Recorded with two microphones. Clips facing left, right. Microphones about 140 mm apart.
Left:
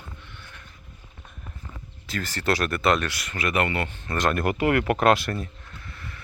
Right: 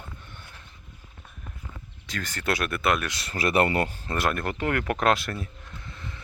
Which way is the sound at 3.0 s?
25° right (ahead or behind).